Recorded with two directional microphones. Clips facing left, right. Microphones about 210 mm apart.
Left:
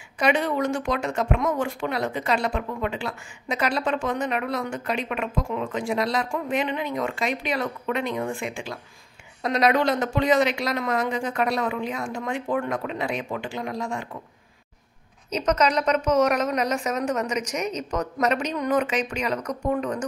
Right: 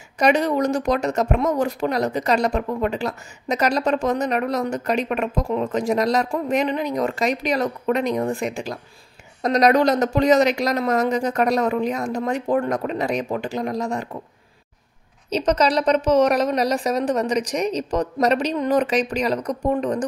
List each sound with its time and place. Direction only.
0.2 s speech: 40° right (ahead or behind)
15.2 s speech: 30° right (ahead or behind)